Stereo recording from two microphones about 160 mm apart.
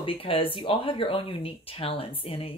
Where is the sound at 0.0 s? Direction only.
35° left (ahead or behind).